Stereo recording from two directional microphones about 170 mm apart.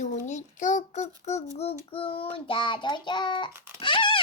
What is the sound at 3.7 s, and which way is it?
Dog, 30° left (ahead or behind).